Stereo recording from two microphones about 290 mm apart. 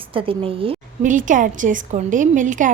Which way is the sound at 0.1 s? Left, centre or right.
Centre.